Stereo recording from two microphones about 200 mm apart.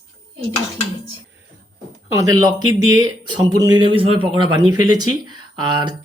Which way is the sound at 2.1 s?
20° right (ahead or behind).